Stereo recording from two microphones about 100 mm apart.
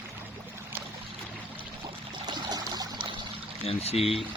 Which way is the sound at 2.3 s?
45° right (ahead or behind).